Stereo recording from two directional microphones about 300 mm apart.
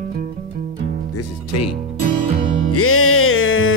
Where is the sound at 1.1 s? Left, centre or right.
Left.